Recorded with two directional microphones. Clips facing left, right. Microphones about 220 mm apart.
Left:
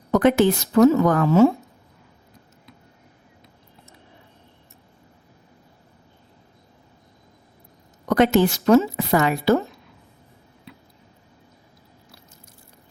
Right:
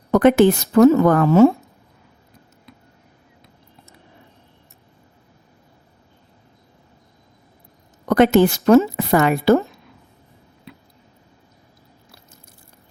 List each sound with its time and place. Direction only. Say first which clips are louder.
0.1 s a woman's voice: right 4 dB; 55° right (ahead or behind)
8.0 s a woman's voice: right 3 dB; 55° right (ahead or behind)